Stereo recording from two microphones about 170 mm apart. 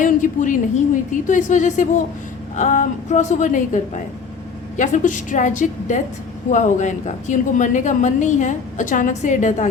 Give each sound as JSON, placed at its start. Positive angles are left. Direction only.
{"t": 0.0, "sound": "a woman's voice", "side_deg": 50}
{"t": 4.8, "sound": "a woman's voice", "side_deg": 45}